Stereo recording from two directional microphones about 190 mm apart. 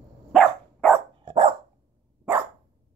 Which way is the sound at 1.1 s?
25° right (ahead or behind).